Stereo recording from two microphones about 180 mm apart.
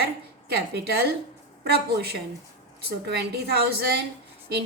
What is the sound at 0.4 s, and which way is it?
A woman's voice, 65° right (ahead or behind).